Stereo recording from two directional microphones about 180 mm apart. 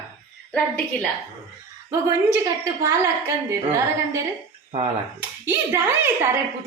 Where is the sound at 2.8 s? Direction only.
15° right (ahead or behind).